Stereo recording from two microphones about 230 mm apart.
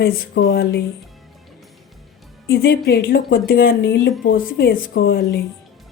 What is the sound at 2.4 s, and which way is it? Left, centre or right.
Speech, left.